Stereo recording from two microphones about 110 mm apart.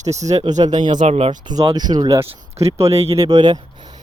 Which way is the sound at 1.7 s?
40° right (ahead or behind).